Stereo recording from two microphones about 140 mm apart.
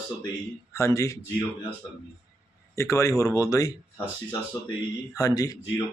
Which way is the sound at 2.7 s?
20° left (ahead or behind).